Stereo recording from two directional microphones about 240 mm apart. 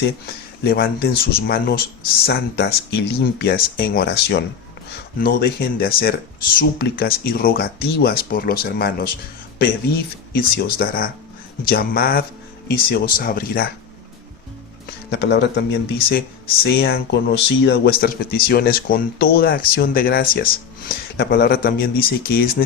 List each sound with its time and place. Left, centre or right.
0.6 s speech: left
10.3 s speech: left
15.1 s speech: left